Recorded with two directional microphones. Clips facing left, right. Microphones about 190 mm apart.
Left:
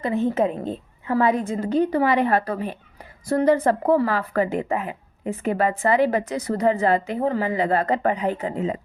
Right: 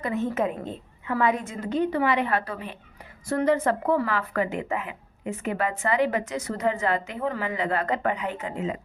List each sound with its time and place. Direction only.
0.0 s speech: 30° left (ahead or behind)